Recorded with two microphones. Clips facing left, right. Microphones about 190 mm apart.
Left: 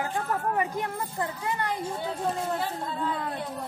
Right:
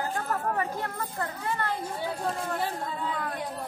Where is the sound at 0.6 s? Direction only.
15° left (ahead or behind).